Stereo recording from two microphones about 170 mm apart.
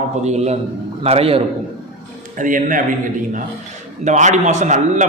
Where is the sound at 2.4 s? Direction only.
50° right (ahead or behind).